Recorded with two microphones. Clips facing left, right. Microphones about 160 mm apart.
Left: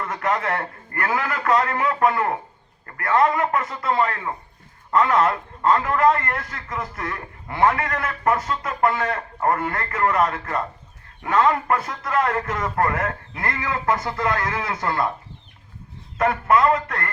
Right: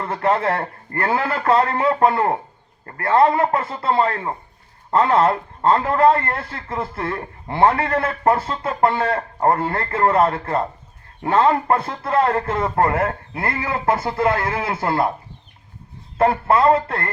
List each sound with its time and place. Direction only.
0.0 s a man's voice: 30° right (ahead or behind)
16.1 s a man's voice: 30° right (ahead or behind)